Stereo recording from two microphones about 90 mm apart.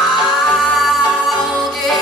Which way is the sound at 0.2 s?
Centre (ahead or behind).